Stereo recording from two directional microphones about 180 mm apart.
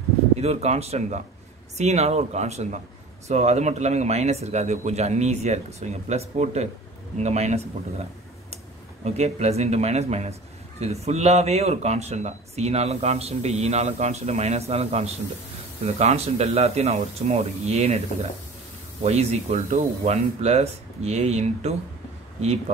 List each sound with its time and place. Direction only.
0.4 s speech: 35° right (ahead or behind)
9.0 s speech: 35° right (ahead or behind)
19.0 s speech: 35° right (ahead or behind)